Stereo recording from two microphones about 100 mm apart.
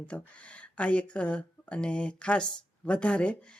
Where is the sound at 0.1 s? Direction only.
15° left (ahead or behind).